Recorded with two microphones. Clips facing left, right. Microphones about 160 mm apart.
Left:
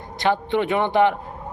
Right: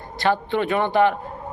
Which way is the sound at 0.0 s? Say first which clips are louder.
Even; 20° left (ahead or behind).